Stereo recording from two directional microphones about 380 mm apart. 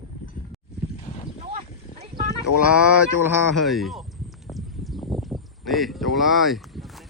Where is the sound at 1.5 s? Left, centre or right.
Centre.